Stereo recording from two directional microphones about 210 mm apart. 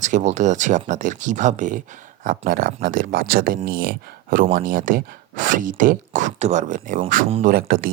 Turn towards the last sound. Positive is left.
turn(degrees=-40)  # may be behind; listen again after turning